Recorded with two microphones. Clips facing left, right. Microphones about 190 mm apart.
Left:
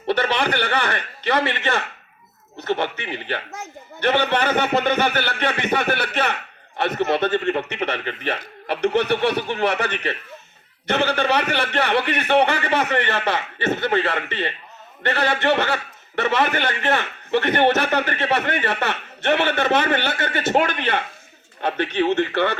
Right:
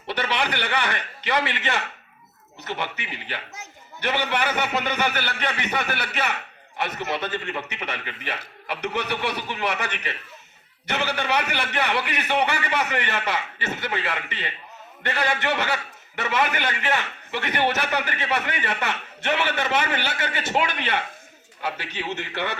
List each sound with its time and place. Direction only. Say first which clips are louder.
0.1 s a man's voice: left 5 dB; 55° left (ahead or behind)